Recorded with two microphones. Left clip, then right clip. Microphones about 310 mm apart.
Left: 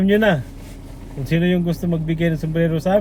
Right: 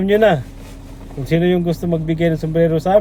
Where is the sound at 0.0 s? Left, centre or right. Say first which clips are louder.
Right 4 dB; centre.